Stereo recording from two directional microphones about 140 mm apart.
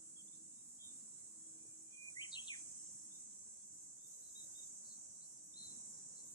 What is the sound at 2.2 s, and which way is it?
Bird, 30° left (ahead or behind).